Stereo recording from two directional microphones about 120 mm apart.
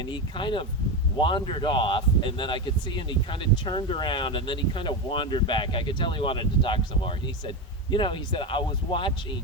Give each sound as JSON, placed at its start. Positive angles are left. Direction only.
{"t": 0.1, "sound": "speech", "side_deg": 45}